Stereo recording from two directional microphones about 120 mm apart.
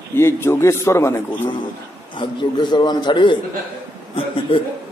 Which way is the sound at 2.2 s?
35° left (ahead or behind).